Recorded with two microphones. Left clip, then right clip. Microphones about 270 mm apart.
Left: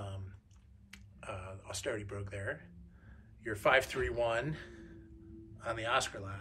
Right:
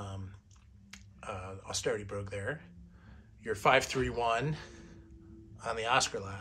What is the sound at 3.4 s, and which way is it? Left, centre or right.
A man's voice, centre.